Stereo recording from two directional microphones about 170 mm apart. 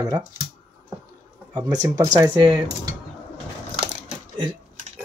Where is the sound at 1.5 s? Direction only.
25° right (ahead or behind).